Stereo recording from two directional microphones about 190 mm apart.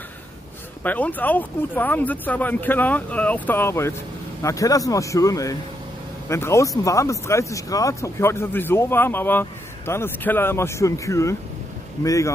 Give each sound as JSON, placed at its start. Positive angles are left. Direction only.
{"t": 0.8, "sound": "speech", "side_deg": 10}